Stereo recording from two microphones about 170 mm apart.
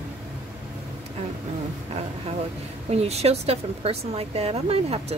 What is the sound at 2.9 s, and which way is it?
Speech, 40° right (ahead or behind).